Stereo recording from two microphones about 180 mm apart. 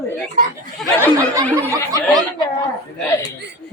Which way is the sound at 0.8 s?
15° right (ahead or behind).